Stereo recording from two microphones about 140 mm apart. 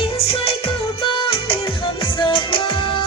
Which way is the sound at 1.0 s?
35° left (ahead or behind).